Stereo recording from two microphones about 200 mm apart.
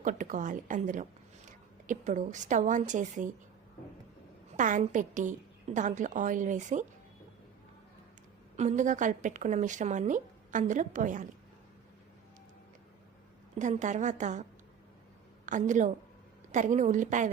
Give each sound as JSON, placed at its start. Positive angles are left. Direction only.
{"t": 0.0, "sound": "a woman's voice", "side_deg": -40}
{"t": 4.5, "sound": "a woman's voice", "side_deg": -40}
{"t": 8.5, "sound": "a woman's voice", "side_deg": -35}
{"t": 13.6, "sound": "a woman's voice", "side_deg": -40}
{"t": 15.4, "sound": "a woman's voice", "side_deg": -40}